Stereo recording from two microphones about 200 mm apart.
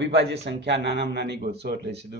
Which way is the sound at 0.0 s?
60° right (ahead or behind).